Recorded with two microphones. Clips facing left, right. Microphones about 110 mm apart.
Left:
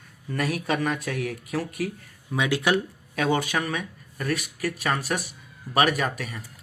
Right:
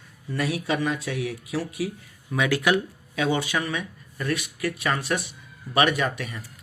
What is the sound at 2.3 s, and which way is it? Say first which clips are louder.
Speech: right 1 dB; 25° left (ahead or behind).